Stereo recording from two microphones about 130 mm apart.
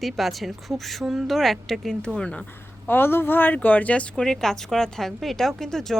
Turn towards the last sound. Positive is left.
turn(degrees=5)  # may be behind; listen again after turning